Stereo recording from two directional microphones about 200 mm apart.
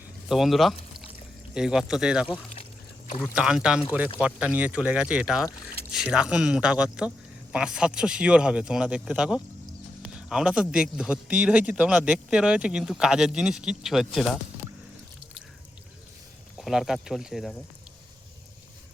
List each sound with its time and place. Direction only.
0.3 s a man's voice: centre (ahead or behind)
16.6 s a man's voice: centre (ahead or behind)